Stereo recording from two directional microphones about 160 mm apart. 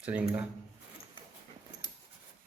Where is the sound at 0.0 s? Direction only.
10° right (ahead or behind).